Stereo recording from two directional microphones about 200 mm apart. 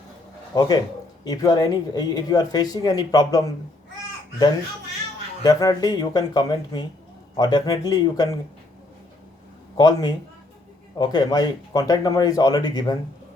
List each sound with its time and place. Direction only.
0.5 s speech: 20° left (ahead or behind)
5.4 s speech: 20° left (ahead or behind)
9.7 s speech: 20° left (ahead or behind)